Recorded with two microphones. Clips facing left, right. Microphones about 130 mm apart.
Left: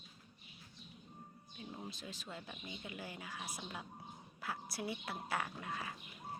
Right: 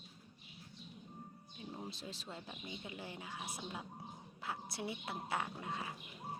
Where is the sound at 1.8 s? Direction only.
35° right (ahead or behind).